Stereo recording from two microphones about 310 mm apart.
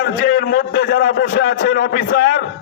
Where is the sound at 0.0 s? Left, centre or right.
Left.